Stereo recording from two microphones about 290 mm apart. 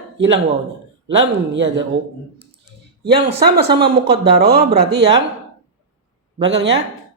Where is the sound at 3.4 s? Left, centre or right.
Right.